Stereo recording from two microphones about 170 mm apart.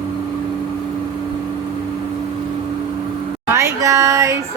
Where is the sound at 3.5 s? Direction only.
15° right (ahead or behind).